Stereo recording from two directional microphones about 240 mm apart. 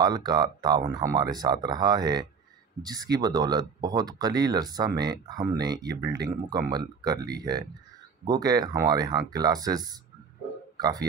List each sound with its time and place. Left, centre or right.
0.0 s speech: centre